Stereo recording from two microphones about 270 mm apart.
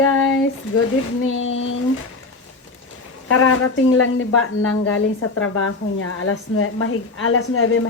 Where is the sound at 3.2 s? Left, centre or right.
Left.